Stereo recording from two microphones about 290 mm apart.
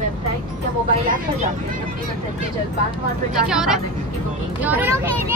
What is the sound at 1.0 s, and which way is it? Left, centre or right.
Speech, right.